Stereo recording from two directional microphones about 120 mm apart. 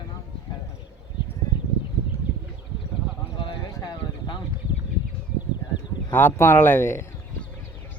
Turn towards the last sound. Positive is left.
turn(degrees=20)  # may be behind; listen again after turning